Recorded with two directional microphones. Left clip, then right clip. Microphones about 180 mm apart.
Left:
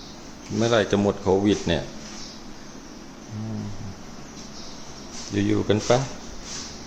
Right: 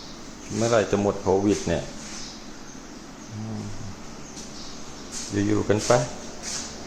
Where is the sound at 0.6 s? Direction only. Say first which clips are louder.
Left 1 dB; 15° left (ahead or behind).